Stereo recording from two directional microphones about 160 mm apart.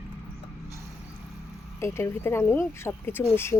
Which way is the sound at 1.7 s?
15° left (ahead or behind).